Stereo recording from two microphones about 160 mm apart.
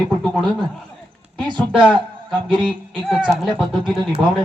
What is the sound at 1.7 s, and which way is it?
Speech, 10° right (ahead or behind).